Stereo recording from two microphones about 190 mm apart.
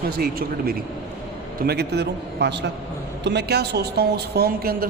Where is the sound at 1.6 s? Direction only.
60° right (ahead or behind).